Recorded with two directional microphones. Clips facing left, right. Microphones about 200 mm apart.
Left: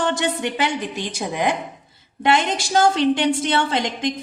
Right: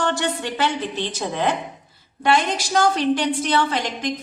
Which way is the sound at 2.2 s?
25° left (ahead or behind).